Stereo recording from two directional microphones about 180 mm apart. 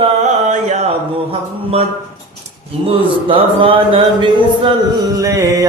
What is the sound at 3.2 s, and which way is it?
Speech, 30° right (ahead or behind).